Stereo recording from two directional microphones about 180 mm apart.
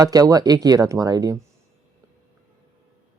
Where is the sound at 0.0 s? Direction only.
20° right (ahead or behind).